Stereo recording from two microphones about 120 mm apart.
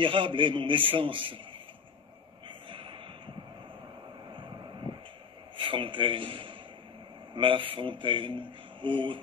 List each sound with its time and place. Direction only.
0.0 s a man's voice: 45° right (ahead or behind)
2.4 s a sound: 45° right (ahead or behind)
5.6 s a man's voice: 45° right (ahead or behind)